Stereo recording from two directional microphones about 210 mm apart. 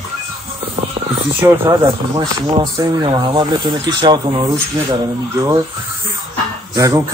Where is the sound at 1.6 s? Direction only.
15° right (ahead or behind).